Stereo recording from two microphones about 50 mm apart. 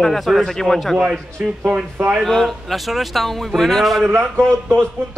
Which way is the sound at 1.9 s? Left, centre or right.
Right.